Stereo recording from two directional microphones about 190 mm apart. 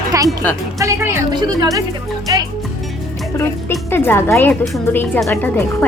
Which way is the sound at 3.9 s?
10° left (ahead or behind).